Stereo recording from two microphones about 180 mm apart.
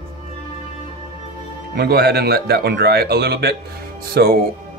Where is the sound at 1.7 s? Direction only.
60° right (ahead or behind).